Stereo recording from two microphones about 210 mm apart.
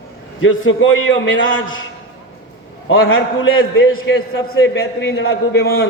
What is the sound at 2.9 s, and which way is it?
A man's voice, 70° left (ahead or behind).